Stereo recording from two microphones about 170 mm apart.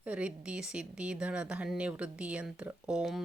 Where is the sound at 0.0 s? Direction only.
5° right (ahead or behind).